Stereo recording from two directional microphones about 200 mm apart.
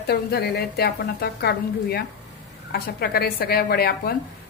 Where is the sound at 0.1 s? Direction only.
55° left (ahead or behind).